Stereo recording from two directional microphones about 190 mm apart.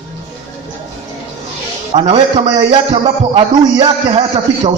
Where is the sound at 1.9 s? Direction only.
30° right (ahead or behind).